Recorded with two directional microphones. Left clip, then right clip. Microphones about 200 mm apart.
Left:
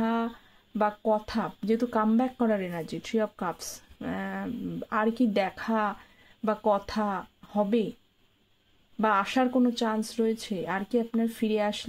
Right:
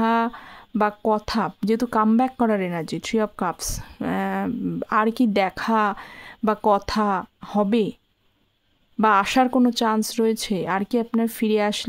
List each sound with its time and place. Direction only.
0.0 s a sound: 40° right (ahead or behind)
0.7 s speech: 45° right (ahead or behind)
9.0 s speech: 45° right (ahead or behind)